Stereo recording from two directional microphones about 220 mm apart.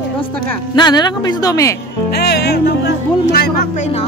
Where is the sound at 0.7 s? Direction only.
20° left (ahead or behind).